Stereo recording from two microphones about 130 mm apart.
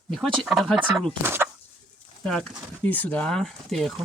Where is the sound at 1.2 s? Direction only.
15° right (ahead or behind).